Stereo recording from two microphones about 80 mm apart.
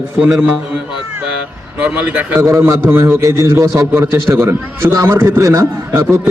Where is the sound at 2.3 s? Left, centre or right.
Right.